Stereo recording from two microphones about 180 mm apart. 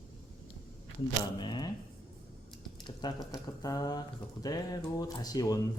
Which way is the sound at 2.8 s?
25° left (ahead or behind).